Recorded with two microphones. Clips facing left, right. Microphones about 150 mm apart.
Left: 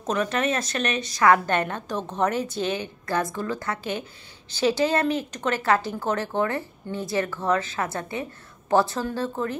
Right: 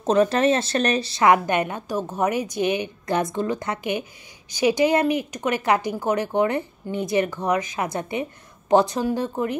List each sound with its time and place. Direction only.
0.0 s a woman's voice: 30° right (ahead or behind)